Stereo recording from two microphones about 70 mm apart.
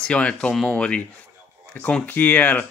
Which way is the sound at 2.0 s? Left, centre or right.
Left.